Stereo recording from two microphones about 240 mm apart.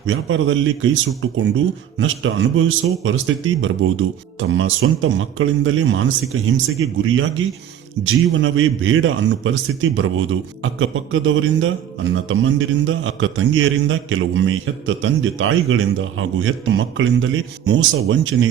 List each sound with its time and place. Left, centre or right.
0.0 s a man's voice: right
7.0 s a man's voice: right